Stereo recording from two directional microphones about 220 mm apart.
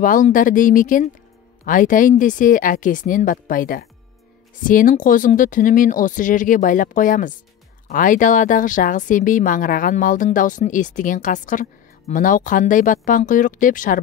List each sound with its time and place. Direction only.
0.0 s speech: 40° left (ahead or behind)